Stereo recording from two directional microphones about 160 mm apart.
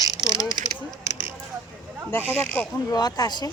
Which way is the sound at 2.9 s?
25° left (ahead or behind).